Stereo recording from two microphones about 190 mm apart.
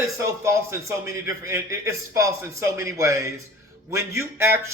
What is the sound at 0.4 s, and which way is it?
A man's voice, 15° right (ahead or behind).